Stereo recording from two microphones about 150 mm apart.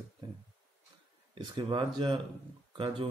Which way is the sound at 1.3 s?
35° right (ahead or behind).